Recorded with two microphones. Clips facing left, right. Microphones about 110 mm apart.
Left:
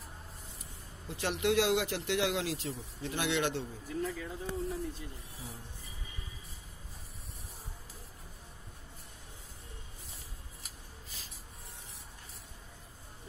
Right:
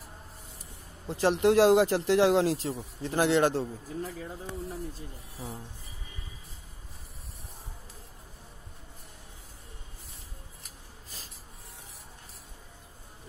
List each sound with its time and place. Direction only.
1.0 s speech: 35° right (ahead or behind)